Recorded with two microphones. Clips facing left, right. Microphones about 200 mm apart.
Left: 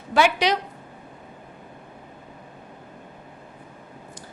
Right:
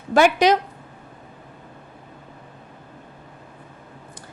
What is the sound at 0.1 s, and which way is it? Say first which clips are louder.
Speech: right 5 dB; 45° right (ahead or behind).